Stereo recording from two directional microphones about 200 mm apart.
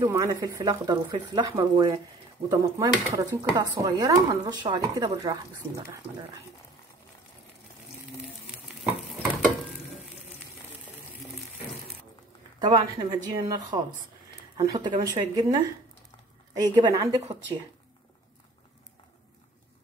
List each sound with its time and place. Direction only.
0.0 s speech: 20° right (ahead or behind)
8.6 s stir: centre (ahead or behind)
12.5 s speech: 20° right (ahead or behind)